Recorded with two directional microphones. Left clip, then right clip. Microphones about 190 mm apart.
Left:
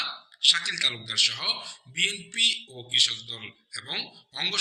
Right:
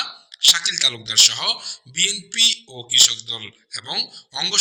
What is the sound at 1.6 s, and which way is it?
A man's voice, 50° right (ahead or behind).